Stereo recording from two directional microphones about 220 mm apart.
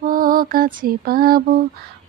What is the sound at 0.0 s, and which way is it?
Lullaby, 40° right (ahead or behind).